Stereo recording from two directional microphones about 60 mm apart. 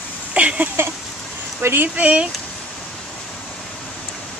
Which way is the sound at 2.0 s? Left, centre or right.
Right.